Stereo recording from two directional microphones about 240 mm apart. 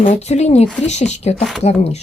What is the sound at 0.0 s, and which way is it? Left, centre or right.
Speech, left.